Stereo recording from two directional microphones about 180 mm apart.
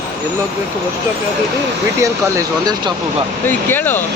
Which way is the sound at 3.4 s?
10° left (ahead or behind).